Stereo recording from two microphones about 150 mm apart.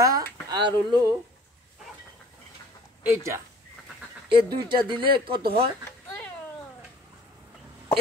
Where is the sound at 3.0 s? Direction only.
15° right (ahead or behind).